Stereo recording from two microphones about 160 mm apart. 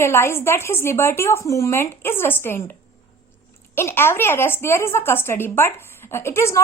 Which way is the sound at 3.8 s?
15° left (ahead or behind).